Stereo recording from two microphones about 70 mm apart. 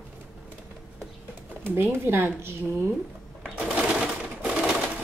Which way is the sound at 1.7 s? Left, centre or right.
Right.